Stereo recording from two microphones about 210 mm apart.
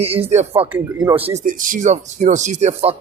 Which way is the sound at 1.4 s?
40° right (ahead or behind).